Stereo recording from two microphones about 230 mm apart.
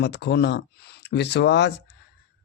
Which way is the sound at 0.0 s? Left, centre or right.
Left.